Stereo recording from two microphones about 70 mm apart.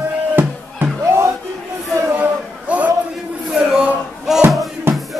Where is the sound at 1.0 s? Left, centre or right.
Right.